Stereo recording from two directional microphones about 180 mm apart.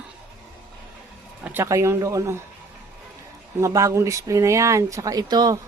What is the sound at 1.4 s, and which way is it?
Speech, 15° right (ahead or behind).